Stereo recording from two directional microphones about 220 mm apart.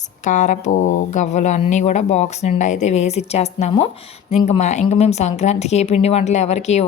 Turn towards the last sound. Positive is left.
turn(degrees=30)  # may be behind; listen again after turning